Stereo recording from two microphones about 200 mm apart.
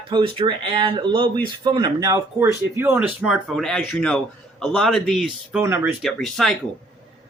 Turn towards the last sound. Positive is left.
turn(degrees=0)  # may be behind; listen again after turning